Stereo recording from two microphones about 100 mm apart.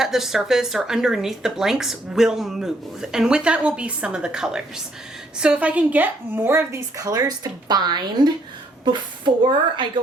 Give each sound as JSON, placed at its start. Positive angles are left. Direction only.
{"t": 0.0, "sound": "a woman's voice", "side_deg": -5}